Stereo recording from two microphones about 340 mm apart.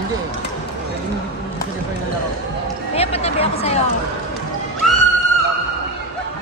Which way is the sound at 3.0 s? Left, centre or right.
Centre.